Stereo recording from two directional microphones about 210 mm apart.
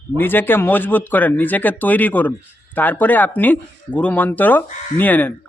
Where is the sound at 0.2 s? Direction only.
10° left (ahead or behind).